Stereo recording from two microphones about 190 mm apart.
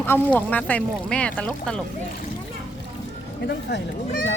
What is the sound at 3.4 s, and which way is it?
Speech, 65° left (ahead or behind).